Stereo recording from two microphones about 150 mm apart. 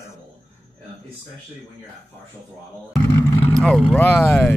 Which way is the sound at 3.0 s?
15° left (ahead or behind).